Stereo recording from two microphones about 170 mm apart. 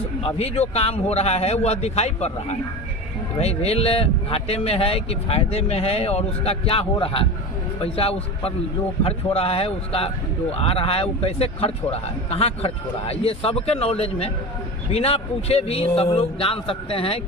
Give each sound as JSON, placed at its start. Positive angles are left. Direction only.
{"t": 0.2, "sound": "a man's voice", "side_deg": 35}